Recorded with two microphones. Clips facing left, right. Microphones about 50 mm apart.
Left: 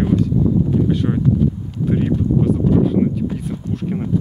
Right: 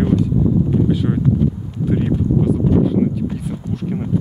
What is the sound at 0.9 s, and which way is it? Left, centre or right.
Speech, centre.